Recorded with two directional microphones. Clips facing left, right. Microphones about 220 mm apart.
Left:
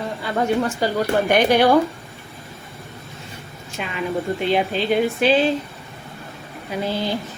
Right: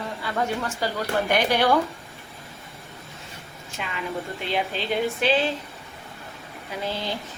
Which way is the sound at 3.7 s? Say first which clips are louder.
Left 6 dB; 20° left (ahead or behind).